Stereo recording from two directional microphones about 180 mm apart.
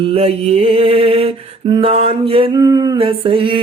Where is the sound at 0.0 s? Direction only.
30° right (ahead or behind).